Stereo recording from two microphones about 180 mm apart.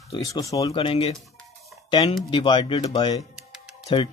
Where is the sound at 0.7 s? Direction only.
30° left (ahead or behind).